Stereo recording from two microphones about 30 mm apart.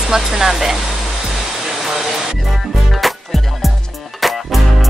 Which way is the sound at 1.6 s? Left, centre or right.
Centre.